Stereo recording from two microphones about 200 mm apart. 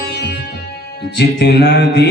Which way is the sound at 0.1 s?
55° left (ahead or behind).